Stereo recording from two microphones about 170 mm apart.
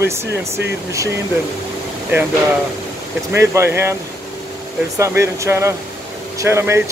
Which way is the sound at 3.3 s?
15° right (ahead or behind).